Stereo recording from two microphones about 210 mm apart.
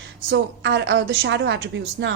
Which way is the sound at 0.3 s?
55° right (ahead or behind).